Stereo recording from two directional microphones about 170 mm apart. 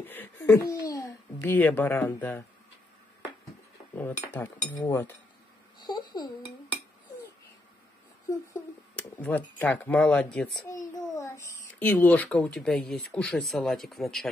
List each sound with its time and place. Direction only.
0.0 s babbling: 10° left (ahead or behind)
1.5 s speech: 10° left (ahead or behind)
3.9 s speech: 10° left (ahead or behind)
8.9 s speech: 10° left (ahead or behind)
10.7 s a child's voice: 20° left (ahead or behind); by 14.3 s centre (ahead or behind)